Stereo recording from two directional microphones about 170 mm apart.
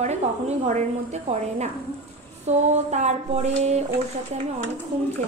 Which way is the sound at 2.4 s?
40° right (ahead or behind).